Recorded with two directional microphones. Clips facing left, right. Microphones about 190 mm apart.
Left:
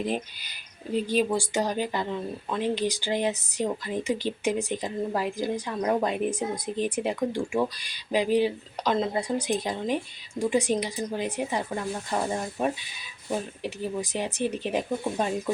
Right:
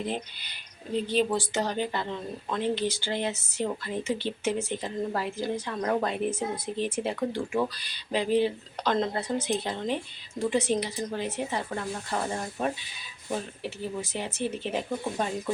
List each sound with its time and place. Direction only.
0.9 s speech: 10° left (ahead or behind)